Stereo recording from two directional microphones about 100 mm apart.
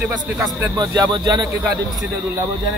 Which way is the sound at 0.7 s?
45° right (ahead or behind).